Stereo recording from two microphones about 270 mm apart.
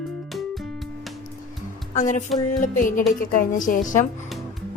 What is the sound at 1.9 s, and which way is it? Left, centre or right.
Speech, left.